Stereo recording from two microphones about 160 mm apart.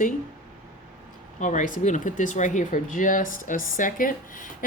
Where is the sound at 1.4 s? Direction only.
50° left (ahead or behind).